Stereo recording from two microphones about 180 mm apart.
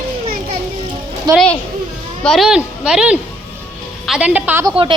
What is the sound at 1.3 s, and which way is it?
Speech, 25° right (ahead or behind).